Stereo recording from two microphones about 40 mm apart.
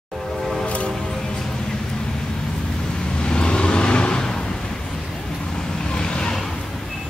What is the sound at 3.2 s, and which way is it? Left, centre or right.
Vehicle, left.